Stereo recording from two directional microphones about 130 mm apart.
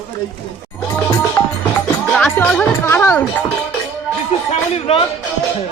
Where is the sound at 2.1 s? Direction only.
10° left (ahead or behind).